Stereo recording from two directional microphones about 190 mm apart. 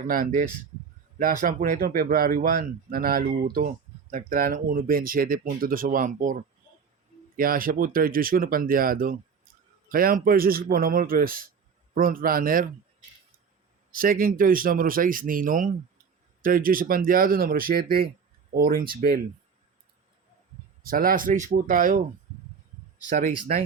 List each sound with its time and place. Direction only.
0.1 s speech: 45° right (ahead or behind)
7.3 s speech: 50° right (ahead or behind)
13.9 s speech: 50° right (ahead or behind)
20.8 s speech: 50° right (ahead or behind)
23.0 s speech: 45° right (ahead or behind)